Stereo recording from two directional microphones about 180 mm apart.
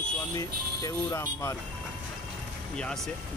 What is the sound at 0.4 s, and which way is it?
Speech, 20° left (ahead or behind).